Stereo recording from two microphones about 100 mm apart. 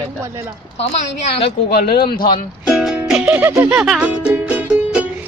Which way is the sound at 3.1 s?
15° right (ahead or behind).